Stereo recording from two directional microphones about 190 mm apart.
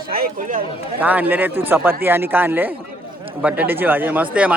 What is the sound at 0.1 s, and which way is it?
Speech, 45° right (ahead or behind).